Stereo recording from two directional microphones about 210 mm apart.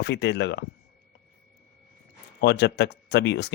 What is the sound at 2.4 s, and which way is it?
Speech, 55° left (ahead or behind).